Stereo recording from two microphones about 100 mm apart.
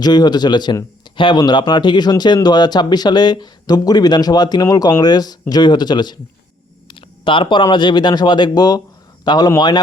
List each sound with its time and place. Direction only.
0.0 s speech: 45° left (ahead or behind)
6.8 s speech: 55° left (ahead or behind)